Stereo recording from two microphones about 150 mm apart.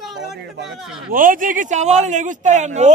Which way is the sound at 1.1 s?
65° right (ahead or behind).